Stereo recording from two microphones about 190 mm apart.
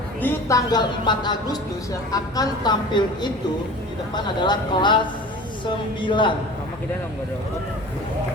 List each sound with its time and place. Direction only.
0.2 s a woman's voice: 15° left (ahead or behind)